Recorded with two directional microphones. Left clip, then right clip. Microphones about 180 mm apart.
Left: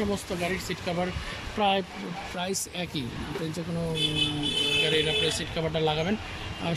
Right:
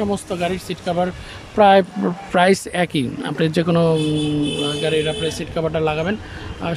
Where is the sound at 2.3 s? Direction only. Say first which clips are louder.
Right 18 dB; 45° right (ahead or behind).